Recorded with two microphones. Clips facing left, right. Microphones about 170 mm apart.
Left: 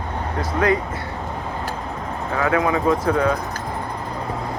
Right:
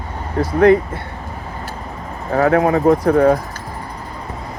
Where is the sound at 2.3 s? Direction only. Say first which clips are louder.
Right 6 dB; 45° right (ahead or behind).